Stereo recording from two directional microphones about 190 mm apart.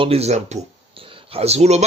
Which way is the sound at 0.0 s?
30° right (ahead or behind).